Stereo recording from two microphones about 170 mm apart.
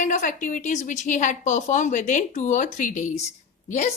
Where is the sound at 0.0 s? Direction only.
50° left (ahead or behind).